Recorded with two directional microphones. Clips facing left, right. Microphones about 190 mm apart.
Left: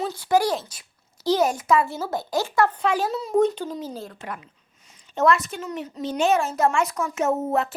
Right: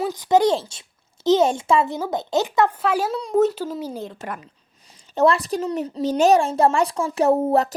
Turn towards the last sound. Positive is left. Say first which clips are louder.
# right 5 dB
turn(degrees=-35)  # may be behind; listen again after turning